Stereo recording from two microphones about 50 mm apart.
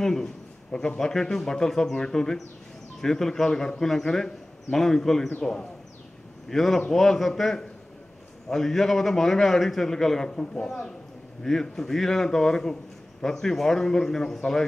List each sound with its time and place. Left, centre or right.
0.0 s a man's voice: centre